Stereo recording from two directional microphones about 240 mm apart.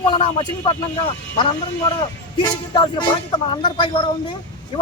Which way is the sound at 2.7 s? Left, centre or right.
Centre.